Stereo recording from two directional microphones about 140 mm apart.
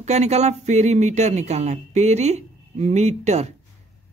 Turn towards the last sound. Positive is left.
turn(degrees=-50)  # may be behind; listen again after turning